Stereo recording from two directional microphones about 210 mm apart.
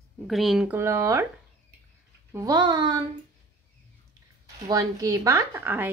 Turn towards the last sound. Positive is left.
turn(degrees=-10)  # may be behind; listen again after turning